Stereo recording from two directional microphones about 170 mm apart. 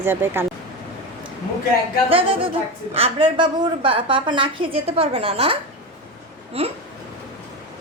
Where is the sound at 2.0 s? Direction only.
35° right (ahead or behind).